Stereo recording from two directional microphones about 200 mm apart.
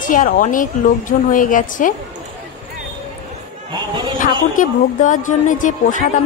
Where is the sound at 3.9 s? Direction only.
25° right (ahead or behind).